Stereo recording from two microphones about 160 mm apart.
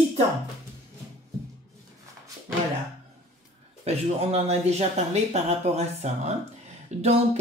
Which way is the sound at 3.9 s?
40° right (ahead or behind).